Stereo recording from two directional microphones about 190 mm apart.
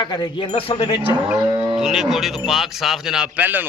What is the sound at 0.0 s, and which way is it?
Speech, 25° left (ahead or behind).